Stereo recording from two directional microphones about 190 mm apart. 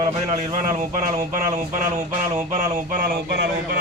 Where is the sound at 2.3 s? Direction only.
40° right (ahead or behind).